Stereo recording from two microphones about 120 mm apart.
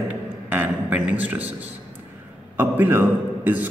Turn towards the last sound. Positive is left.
turn(degrees=-15)  # may be behind; listen again after turning